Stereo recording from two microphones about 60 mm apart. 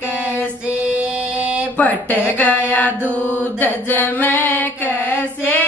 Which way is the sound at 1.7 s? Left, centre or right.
Left.